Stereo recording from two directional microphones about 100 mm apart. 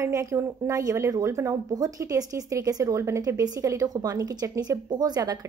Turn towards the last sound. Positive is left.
turn(degrees=-40)  # may be behind; listen again after turning